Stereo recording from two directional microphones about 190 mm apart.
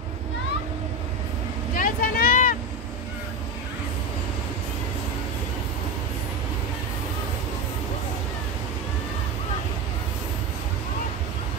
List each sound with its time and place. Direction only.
1.8 s vehicle: 45° left (ahead or behind)